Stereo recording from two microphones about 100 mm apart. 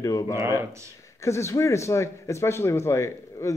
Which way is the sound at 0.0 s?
35° left (ahead or behind).